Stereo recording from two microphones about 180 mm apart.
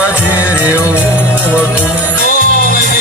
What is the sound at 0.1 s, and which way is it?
Music, 10° right (ahead or behind).